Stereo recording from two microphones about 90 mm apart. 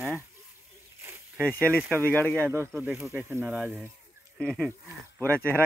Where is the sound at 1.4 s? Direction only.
15° left (ahead or behind).